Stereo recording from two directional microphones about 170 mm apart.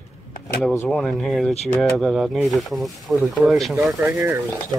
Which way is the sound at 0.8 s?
Centre (ahead or behind).